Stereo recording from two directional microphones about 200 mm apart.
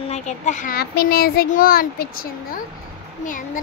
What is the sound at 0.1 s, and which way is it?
A child's voice, 40° left (ahead or behind).